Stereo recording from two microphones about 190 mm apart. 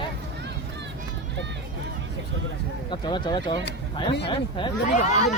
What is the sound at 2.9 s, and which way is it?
Speech, 25° left (ahead or behind).